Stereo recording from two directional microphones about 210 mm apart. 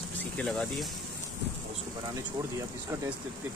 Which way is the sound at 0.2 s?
5° left (ahead or behind).